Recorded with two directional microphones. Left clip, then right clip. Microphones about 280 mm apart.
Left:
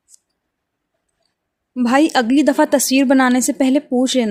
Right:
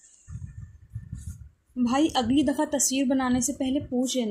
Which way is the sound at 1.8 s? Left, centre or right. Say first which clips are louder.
Left 10 dB; left.